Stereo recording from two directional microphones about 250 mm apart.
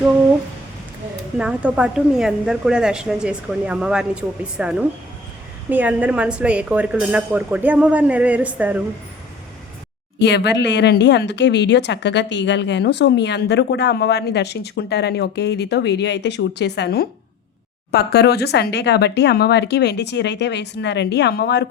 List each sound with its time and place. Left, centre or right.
1.4 s a woman's voice: centre
10.2 s speech: left